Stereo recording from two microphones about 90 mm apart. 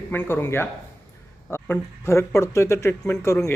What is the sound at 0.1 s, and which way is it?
Speech, 25° left (ahead or behind).